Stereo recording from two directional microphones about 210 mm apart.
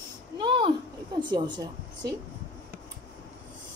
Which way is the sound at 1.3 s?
20° right (ahead or behind).